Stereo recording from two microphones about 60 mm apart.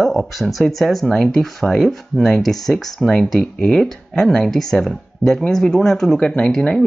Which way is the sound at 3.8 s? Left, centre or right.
Centre.